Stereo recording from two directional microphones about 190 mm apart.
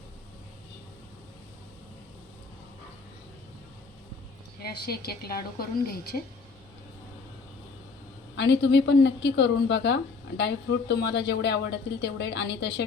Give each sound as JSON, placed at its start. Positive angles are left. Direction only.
{"t": 4.6, "sound": "a woman's voice", "side_deg": 55}
{"t": 8.4, "sound": "a woman's voice", "side_deg": 65}